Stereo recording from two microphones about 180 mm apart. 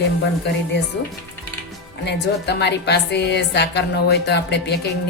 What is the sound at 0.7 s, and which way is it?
Speech, 70° left (ahead or behind).